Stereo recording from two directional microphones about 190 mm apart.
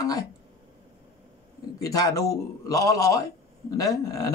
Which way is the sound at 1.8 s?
20° left (ahead or behind).